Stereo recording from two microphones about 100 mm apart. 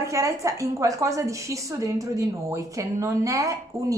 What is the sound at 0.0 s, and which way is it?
A woman's voice, 30° right (ahead or behind).